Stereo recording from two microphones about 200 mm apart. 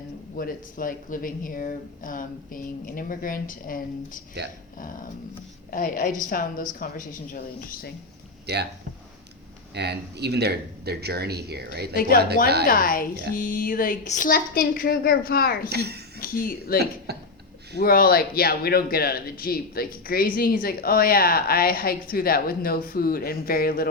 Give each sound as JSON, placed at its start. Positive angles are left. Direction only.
{"t": 0.3, "sound": "speech", "side_deg": 45}
{"t": 5.7, "sound": "speech", "side_deg": 45}
{"t": 8.5, "sound": "speech", "side_deg": -55}
{"t": 9.7, "sound": "speech", "side_deg": -55}
{"t": 11.9, "sound": "speech", "side_deg": 45}
{"t": 15.7, "sound": "a sound", "side_deg": -55}
{"t": 16.2, "sound": "speech", "side_deg": 45}
{"t": 17.1, "sound": "a sound", "side_deg": -55}
{"t": 17.7, "sound": "speech", "side_deg": 50}